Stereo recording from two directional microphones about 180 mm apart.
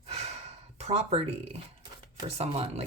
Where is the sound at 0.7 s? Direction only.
35° right (ahead or behind).